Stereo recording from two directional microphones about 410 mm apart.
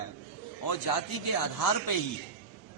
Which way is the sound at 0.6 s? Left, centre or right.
Left.